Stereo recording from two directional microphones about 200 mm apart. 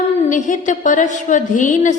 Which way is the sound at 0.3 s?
40° left (ahead or behind).